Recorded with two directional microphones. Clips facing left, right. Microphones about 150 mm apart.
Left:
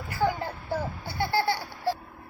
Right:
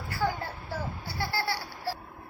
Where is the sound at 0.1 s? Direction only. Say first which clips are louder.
Left 4 dB; 20° left (ahead or behind).